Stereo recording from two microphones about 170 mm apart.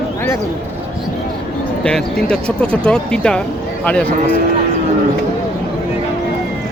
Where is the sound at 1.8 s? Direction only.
5° left (ahead or behind).